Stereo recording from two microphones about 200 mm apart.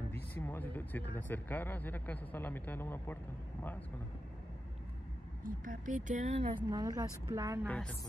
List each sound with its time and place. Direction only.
0.3 s speech: 10° left (ahead or behind)
5.4 s speech: 45° right (ahead or behind)
6.7 s speech: 20° right (ahead or behind)
7.6 s speech: 5° left (ahead or behind)